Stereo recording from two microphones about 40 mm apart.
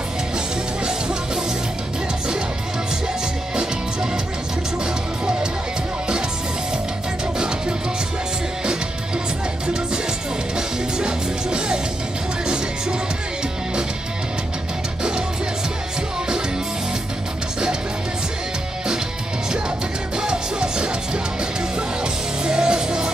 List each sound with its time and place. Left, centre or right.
0.8 s music: centre
5.2 s music: right
10.5 s music: centre
20.2 s music: centre